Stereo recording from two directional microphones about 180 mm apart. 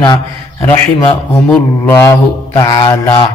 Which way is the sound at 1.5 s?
10° left (ahead or behind).